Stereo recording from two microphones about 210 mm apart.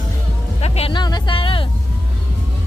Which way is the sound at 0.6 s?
25° left (ahead or behind).